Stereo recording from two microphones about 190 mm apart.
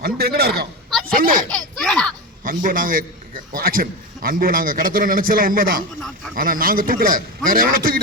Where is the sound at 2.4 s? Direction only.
45° right (ahead or behind).